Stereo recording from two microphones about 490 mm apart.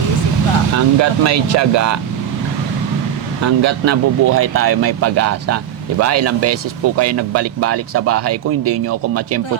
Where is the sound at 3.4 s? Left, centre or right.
Right.